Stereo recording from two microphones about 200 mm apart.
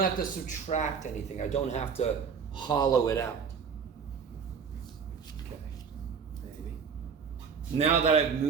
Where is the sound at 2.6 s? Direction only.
20° left (ahead or behind).